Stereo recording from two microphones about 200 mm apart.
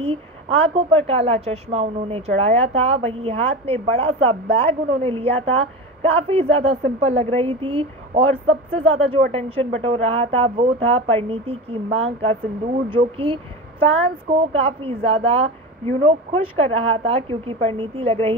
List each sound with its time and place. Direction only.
0.0 s a woman's voice: 30° right (ahead or behind)